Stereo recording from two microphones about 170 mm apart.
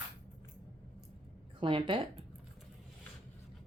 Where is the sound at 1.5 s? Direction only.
30° right (ahead or behind).